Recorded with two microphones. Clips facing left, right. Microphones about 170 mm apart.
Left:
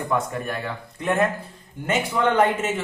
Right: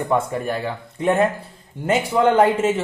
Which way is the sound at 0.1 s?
30° right (ahead or behind).